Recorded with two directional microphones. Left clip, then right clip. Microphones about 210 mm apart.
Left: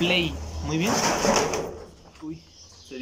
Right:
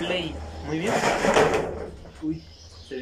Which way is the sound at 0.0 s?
15° left (ahead or behind).